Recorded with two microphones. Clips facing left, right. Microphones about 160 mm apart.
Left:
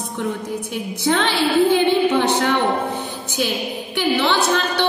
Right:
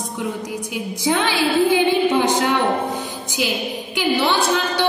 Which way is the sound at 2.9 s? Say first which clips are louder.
Left 1 dB; 10° right (ahead or behind).